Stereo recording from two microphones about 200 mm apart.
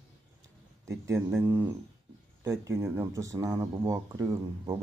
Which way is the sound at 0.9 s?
15° right (ahead or behind).